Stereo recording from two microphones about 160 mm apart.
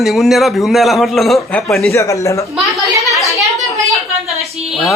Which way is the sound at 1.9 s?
20° left (ahead or behind).